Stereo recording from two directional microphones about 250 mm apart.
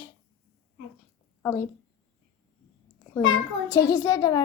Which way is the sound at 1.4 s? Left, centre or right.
Centre.